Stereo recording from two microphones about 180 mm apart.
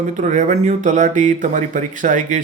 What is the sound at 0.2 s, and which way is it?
Speech, 45° right (ahead or behind).